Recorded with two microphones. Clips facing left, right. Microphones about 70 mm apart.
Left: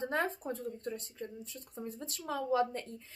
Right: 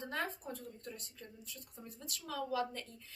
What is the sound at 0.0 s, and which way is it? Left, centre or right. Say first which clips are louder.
Speech: left 6 dB; left.